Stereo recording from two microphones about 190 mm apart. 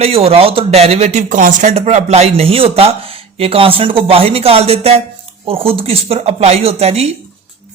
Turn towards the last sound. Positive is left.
turn(degrees=-35)  # may be behind; listen again after turning